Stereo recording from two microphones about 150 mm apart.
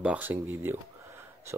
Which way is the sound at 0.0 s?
10° right (ahead or behind).